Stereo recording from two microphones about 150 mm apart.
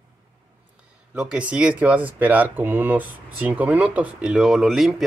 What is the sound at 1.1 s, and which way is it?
Speech, 10° right (ahead or behind).